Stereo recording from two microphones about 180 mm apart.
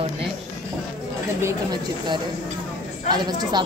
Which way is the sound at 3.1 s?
20° right (ahead or behind).